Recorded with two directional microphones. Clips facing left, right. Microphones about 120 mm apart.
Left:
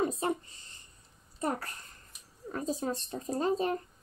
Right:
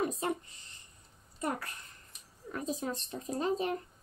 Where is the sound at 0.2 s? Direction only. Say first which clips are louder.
Left 2 dB; 30° left (ahead or behind).